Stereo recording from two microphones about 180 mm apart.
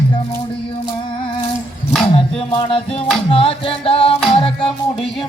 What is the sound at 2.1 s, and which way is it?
Music, 30° left (ahead or behind).